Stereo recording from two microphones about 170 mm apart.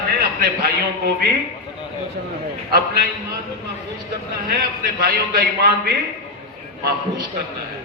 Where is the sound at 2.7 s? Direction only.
65° right (ahead or behind).